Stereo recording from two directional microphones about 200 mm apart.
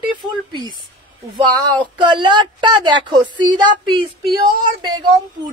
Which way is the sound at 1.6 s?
25° right (ahead or behind).